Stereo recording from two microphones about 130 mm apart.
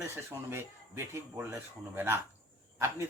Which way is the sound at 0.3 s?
20° right (ahead or behind).